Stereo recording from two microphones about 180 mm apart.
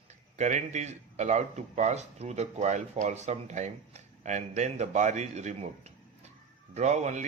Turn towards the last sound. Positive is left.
turn(degrees=-40)  # may be behind; listen again after turning